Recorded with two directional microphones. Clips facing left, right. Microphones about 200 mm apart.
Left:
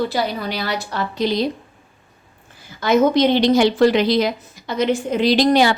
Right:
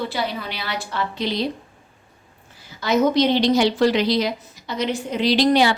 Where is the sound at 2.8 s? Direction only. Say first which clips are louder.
Left 3 dB; 55° left (ahead or behind).